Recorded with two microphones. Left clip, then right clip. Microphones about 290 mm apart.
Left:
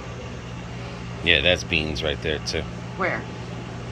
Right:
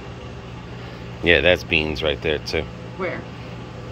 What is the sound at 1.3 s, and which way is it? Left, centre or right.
Speech, centre.